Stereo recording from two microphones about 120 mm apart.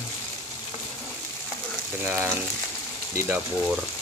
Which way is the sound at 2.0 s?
10° right (ahead or behind).